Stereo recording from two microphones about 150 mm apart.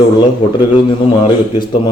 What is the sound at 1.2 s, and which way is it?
Speech, 30° left (ahead or behind).